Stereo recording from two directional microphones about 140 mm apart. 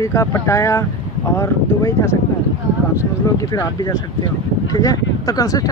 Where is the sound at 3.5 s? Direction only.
25° left (ahead or behind).